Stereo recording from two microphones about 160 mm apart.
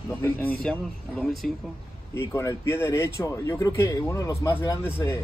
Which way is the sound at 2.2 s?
15° left (ahead or behind).